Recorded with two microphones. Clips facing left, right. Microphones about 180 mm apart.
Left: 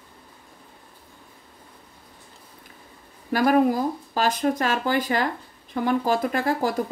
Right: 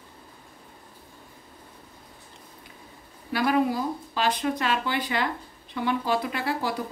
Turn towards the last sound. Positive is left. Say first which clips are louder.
# left 5 dB
turn(degrees=45)  # may be behind; listen again after turning